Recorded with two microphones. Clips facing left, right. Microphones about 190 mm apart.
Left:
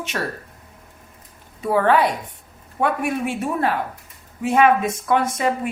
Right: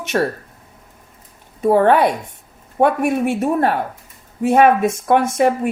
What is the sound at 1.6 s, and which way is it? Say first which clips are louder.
A woman's voice: right 5 dB; 45° right (ahead or behind).